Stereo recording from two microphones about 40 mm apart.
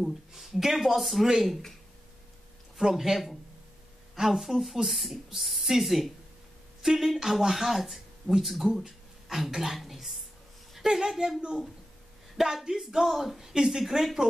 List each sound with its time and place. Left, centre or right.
0.0 s speech: centre
2.8 s a woman's voice: centre
12.4 s a woman's voice: centre